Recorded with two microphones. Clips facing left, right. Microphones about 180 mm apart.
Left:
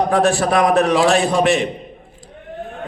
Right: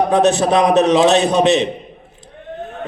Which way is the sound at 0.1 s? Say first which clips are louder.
Right 2 dB; 20° right (ahead or behind).